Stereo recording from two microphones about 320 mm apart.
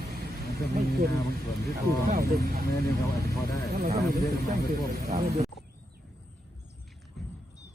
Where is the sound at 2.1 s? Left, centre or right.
Right.